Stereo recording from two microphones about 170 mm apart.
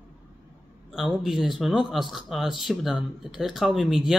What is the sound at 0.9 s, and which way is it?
A man's voice, centre (ahead or behind).